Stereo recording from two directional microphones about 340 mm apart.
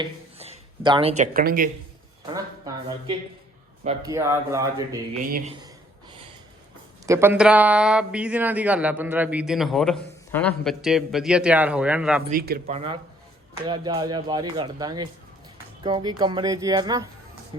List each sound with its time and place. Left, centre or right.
0.0 s speech: centre
3.8 s speech: centre
7.0 s speech: centre
12.3 s speech: right